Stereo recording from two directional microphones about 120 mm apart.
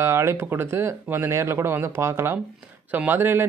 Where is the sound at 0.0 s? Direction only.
20° right (ahead or behind).